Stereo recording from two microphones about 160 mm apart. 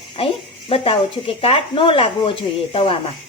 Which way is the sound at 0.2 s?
35° left (ahead or behind).